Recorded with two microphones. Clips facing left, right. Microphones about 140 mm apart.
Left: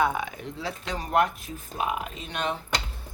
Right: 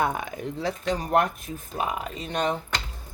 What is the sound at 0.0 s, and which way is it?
Speech, 45° right (ahead or behind).